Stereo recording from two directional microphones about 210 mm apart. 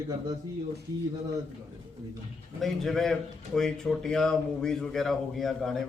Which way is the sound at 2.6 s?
Centre (ahead or behind).